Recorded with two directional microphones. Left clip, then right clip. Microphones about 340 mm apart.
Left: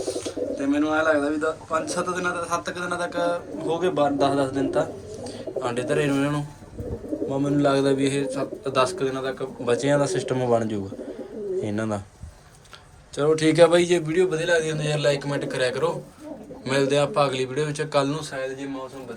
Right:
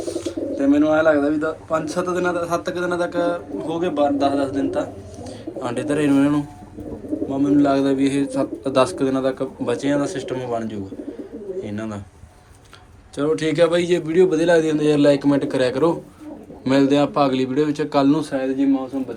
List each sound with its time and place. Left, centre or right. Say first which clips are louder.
0.0 s a man's voice: right 2 dB; centre
13.1 s a man's voice: left 1 dB; centre